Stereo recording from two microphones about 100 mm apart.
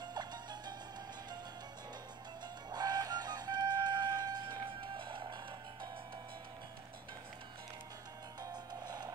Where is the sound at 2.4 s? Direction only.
45° right (ahead or behind).